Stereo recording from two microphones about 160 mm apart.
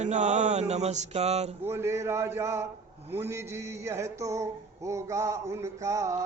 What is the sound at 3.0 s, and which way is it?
Female singing, 15° right (ahead or behind).